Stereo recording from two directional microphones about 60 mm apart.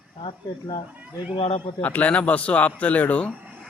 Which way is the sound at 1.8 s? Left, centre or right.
Left.